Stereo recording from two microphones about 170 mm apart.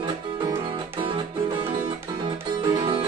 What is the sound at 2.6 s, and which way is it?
Music, 30° right (ahead or behind).